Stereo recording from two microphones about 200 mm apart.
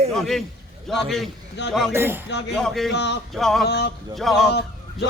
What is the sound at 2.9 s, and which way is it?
Speech, 60° left (ahead or behind).